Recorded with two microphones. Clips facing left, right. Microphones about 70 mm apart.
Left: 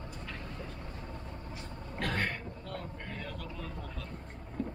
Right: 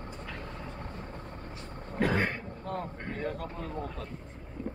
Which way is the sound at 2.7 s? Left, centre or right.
Right.